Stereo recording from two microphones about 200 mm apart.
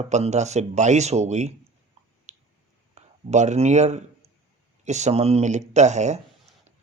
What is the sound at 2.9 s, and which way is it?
Speech, 35° right (ahead or behind).